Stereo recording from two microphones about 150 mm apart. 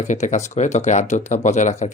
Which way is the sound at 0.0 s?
50° left (ahead or behind).